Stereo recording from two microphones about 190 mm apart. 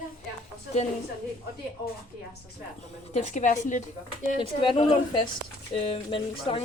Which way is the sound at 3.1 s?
40° left (ahead or behind).